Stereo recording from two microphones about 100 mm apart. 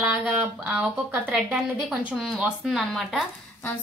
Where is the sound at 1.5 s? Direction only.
5° right (ahead or behind).